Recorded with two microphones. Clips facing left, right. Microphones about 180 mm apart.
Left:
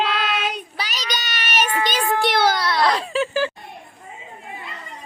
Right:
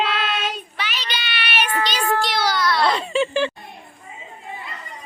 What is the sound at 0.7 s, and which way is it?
Child singing, 40° left (ahead or behind).